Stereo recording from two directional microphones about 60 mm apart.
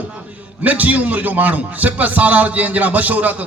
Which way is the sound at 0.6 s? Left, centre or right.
Right.